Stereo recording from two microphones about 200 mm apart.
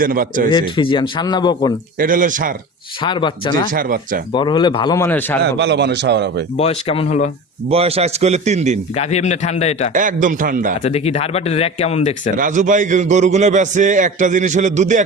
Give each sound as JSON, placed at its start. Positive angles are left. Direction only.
{"t": 0.0, "sound": "speech", "side_deg": -45}
{"t": 0.5, "sound": "speech", "side_deg": 25}
{"t": 2.0, "sound": "speech", "side_deg": -40}
{"t": 3.0, "sound": "speech", "side_deg": 25}
{"t": 3.7, "sound": "speech", "side_deg": -45}
{"t": 4.3, "sound": "speech", "side_deg": 25}
{"t": 5.4, "sound": "a man's voice", "side_deg": -60}
{"t": 6.6, "sound": "speech", "side_deg": 30}
{"t": 7.7, "sound": "a man's voice", "side_deg": -30}
{"t": 9.0, "sound": "speech", "side_deg": 35}
{"t": 9.9, "sound": "a man's voice", "side_deg": -40}
{"t": 10.8, "sound": "speech", "side_deg": 30}
{"t": 12.4, "sound": "a man's voice", "side_deg": -40}